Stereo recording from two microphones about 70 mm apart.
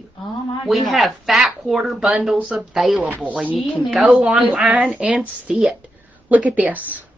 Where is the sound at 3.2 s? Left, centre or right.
Right.